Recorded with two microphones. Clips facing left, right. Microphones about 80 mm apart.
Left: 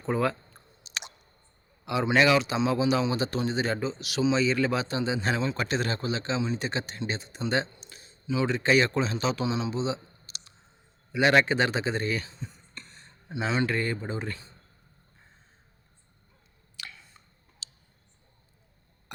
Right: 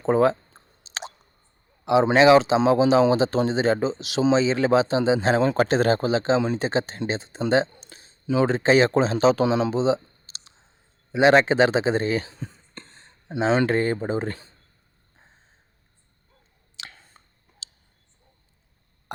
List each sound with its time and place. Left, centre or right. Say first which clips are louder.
0.0 s a sound: right 8 dB; right
1.8 s speech: right 7 dB; right
5.4 s speech: right 9 dB; right
5.6 s speech: right 9 dB; right
12.2 s speech: right 4 dB; right
13.7 s speech: right 7 dB; right
16.9 s a sound: even; right